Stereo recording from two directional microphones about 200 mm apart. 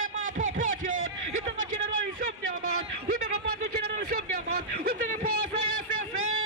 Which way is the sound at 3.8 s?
50° right (ahead or behind).